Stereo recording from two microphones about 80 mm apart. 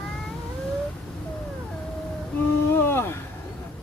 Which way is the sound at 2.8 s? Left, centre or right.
Left.